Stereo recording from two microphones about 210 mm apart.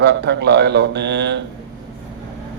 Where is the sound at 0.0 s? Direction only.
55° right (ahead or behind).